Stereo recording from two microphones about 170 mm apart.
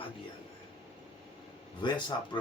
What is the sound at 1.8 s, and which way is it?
Speech, 25° left (ahead or behind).